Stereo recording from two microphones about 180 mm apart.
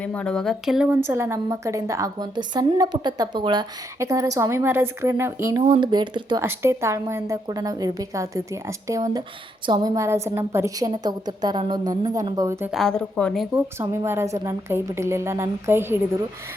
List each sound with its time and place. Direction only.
0.0 s speech: 5° left (ahead or behind)
1.0 s a woman's voice: 15° right (ahead or behind)
5.6 s a woman's voice: 25° right (ahead or behind)
6.4 s a woman's voice: 15° right (ahead or behind)
12.7 s speech: 5° left (ahead or behind)
13.7 s a woman's voice: 15° right (ahead or behind)